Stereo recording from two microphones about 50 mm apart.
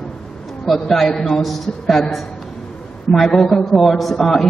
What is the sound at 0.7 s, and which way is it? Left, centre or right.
A woman's voice, centre.